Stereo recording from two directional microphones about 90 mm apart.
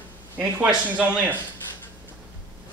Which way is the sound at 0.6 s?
15° right (ahead or behind).